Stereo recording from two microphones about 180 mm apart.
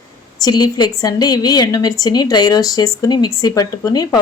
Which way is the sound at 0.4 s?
20° left (ahead or behind).